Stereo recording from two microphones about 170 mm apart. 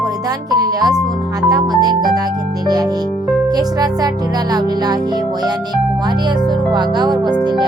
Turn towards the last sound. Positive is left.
turn(degrees=-25)  # may be behind; listen again after turning